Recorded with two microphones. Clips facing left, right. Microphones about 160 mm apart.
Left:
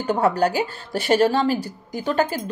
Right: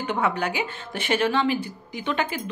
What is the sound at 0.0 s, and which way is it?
Speech, 40° left (ahead or behind).